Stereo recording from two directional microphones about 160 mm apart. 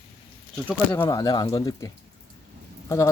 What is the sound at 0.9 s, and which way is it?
Speech, 20° left (ahead or behind).